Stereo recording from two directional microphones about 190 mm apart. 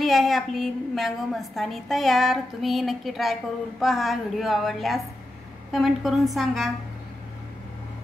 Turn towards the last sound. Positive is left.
turn(degrees=0)  # may be behind; listen again after turning